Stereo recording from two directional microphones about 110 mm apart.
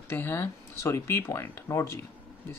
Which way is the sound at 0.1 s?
20° left (ahead or behind).